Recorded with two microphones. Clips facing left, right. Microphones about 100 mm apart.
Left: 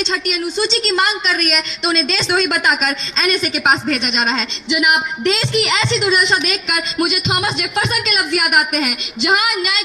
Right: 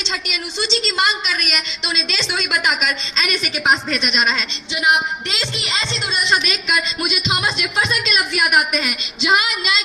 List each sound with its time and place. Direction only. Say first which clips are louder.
0.0 s a woman's voice: left 7 dB; 45° left (ahead or behind)
4.7 s a woman's voice: left 2 dB; 70° left (ahead or behind)